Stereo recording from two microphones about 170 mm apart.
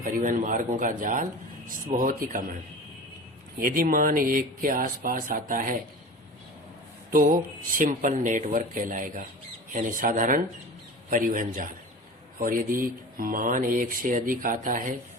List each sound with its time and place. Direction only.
0.0 s speech: 50° right (ahead or behind)
3.6 s speech: 60° right (ahead or behind)
7.1 s speech: 55° right (ahead or behind)